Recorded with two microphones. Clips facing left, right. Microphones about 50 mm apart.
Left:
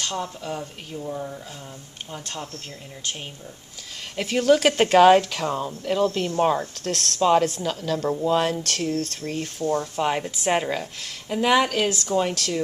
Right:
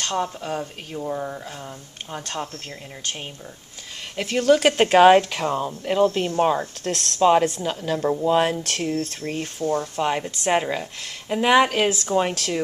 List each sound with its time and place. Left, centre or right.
0.1 s speech: right
4.2 s speech: centre
4.9 s speech: centre
6.4 s speech: centre